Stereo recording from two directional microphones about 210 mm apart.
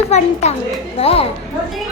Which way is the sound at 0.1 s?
30° left (ahead or behind).